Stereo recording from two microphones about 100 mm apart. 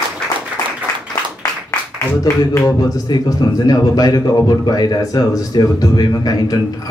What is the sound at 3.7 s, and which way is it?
A man's voice, 40° left (ahead or behind).